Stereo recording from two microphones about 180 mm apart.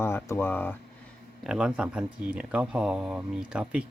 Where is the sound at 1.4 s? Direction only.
5° right (ahead or behind).